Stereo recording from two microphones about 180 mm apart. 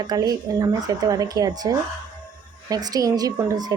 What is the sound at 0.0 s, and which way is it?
A woman's voice, 20° right (ahead or behind).